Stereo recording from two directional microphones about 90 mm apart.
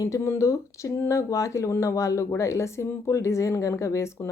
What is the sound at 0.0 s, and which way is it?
Speech, 35° left (ahead or behind).